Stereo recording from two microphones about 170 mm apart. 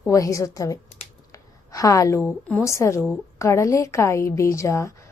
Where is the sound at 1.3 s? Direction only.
20° left (ahead or behind).